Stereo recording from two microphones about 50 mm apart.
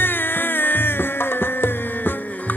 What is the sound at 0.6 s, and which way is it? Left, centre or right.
Music, left.